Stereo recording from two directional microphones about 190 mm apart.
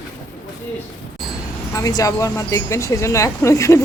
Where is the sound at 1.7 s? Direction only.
20° left (ahead or behind).